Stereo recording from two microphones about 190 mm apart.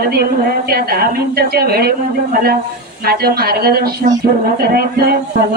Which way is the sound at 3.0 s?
55° right (ahead or behind).